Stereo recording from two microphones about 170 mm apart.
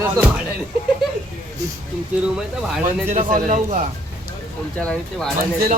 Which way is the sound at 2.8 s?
45° right (ahead or behind).